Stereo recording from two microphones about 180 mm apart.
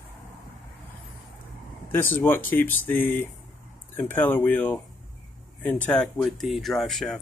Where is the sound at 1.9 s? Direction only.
10° left (ahead or behind).